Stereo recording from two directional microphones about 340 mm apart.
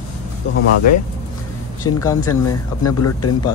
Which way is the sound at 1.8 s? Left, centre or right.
Centre.